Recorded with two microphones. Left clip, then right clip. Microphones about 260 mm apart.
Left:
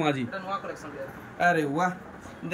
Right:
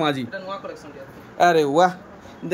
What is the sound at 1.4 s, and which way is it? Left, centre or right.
Speech, centre.